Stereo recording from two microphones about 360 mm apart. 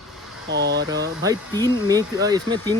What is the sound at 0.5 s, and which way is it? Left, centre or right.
Speech, right.